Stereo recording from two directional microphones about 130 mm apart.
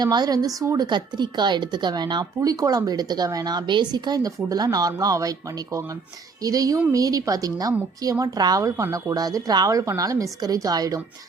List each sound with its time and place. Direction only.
0.0 s speech: 30° right (ahead or behind)